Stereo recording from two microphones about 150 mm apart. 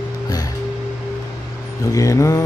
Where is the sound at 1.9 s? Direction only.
20° left (ahead or behind).